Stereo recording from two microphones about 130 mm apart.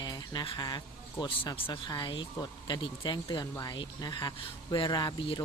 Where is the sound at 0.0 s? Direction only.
30° left (ahead or behind).